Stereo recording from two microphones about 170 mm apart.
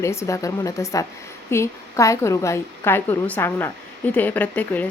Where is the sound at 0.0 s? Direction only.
15° left (ahead or behind).